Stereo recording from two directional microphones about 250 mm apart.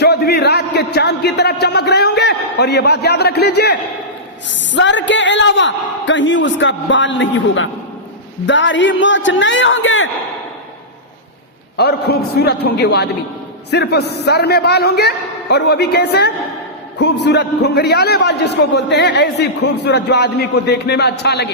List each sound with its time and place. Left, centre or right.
0.0 s a sound: left
0.9 s a man's voice: left
11.8 s a man's voice: left